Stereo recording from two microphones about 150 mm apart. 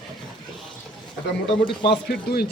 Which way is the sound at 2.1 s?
90° left.